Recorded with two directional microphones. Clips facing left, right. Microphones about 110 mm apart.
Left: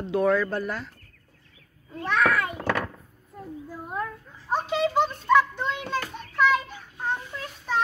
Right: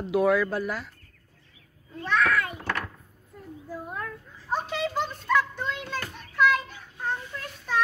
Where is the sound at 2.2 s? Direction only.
25° left (ahead or behind).